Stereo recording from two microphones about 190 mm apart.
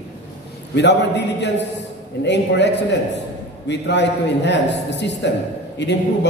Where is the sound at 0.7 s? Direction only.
65° left (ahead or behind).